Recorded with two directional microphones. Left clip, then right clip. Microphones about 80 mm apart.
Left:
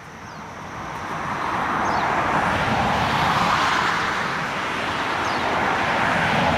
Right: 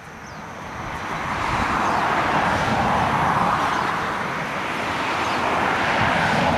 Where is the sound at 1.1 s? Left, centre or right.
Right.